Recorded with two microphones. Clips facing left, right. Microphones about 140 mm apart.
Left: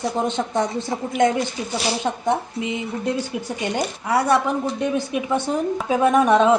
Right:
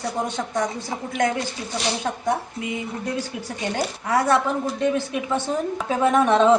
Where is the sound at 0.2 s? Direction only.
20° left (ahead or behind).